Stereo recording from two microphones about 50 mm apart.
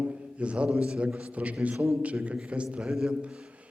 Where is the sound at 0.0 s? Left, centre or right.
Right.